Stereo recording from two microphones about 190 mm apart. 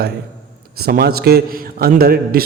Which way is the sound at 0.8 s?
55° right (ahead or behind).